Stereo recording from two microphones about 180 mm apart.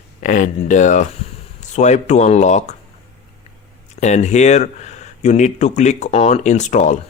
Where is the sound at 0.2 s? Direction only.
45° left (ahead or behind).